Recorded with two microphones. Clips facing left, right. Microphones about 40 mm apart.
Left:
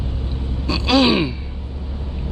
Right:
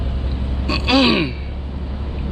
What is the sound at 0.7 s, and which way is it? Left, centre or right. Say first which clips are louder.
Gasp: even; centre.